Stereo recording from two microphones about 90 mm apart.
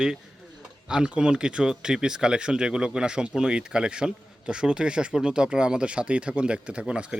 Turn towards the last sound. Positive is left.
turn(degrees=-10)  # may be behind; listen again after turning